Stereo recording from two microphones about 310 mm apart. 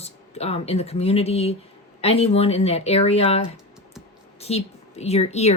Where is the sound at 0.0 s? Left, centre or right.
Centre.